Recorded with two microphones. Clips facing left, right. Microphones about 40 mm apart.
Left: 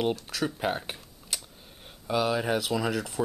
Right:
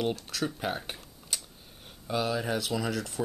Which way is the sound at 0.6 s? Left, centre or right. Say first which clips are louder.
Left 3 dB; centre.